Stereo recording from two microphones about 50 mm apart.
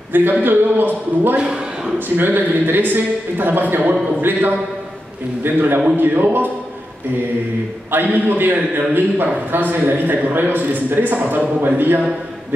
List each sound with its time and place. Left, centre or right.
0.1 s a man's voice: right
1.4 s a sound: centre
2.1 s a man's voice: right
7.9 s a man's voice: right